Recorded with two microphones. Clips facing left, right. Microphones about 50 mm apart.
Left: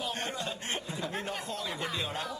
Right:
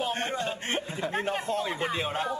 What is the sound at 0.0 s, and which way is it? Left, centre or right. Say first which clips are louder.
A man's voice: right 6 dB; right.